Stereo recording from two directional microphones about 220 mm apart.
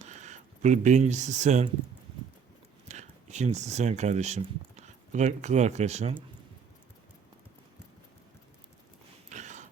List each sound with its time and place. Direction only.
0.0 s speech: 30° right (ahead or behind)
2.9 s speech: 30° right (ahead or behind)
9.3 s a sound: 35° right (ahead or behind)